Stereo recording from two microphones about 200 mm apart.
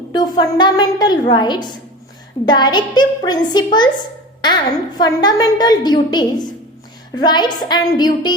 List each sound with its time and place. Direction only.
0.1 s a woman's voice: 20° left (ahead or behind)